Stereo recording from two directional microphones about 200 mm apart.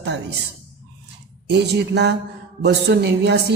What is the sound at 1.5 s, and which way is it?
A man's voice, 55° right (ahead or behind).